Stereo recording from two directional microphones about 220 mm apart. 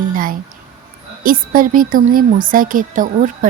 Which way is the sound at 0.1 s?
40° right (ahead or behind).